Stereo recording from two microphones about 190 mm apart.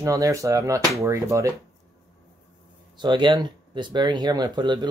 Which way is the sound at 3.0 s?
25° right (ahead or behind).